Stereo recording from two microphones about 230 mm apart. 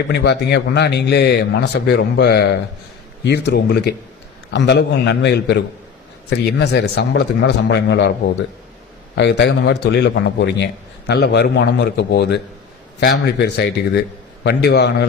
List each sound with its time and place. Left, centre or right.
0.1 s a man's voice: left
9.1 s a man's voice: left